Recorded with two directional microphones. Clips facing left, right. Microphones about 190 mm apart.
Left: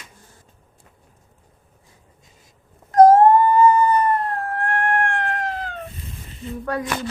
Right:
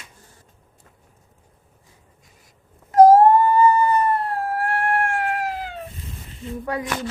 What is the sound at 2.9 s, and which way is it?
Dog, 10° right (ahead or behind).